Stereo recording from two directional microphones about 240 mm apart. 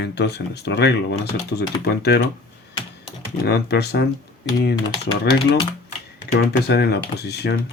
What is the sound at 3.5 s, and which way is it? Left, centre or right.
Speech, left.